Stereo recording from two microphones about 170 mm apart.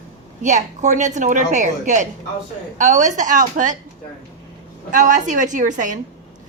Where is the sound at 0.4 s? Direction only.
45° right (ahead or behind).